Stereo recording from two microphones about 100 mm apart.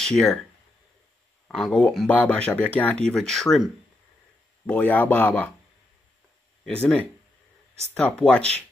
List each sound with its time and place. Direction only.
0.0 s speech: 5° left (ahead or behind)
1.5 s speech: 5° left (ahead or behind)
4.6 s speech: 15° left (ahead or behind)
6.8 s speech: 15° left (ahead or behind)